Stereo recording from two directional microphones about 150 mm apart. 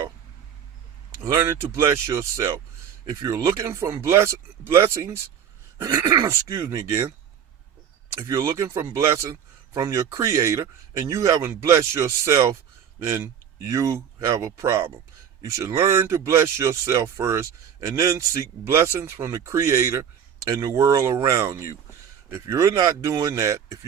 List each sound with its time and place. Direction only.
1.2 s speech: 20° right (ahead or behind)
8.1 s speech: 20° right (ahead or behind)